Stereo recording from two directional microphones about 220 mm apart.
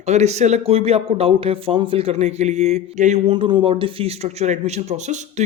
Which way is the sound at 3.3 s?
20° right (ahead or behind).